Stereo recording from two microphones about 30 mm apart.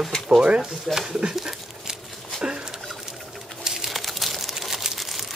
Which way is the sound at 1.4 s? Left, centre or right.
Right.